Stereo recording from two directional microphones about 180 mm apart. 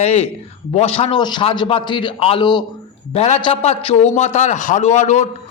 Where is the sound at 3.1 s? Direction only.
35° left (ahead or behind).